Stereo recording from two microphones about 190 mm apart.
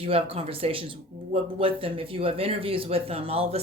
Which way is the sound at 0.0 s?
30° right (ahead or behind).